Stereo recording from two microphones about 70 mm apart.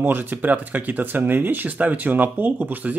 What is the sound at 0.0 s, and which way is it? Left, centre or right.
Speech, right.